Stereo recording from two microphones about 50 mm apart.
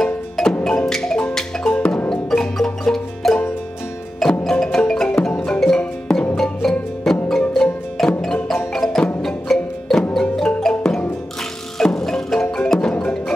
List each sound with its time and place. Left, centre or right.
0.0 s music: centre
1.6 s music: left
2.0 s music: centre